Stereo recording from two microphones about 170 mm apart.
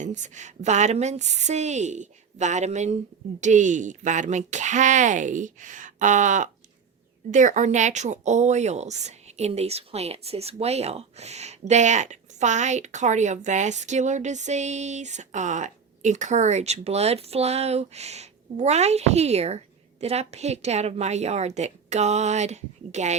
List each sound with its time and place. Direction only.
0.0 s speech: 45° right (ahead or behind)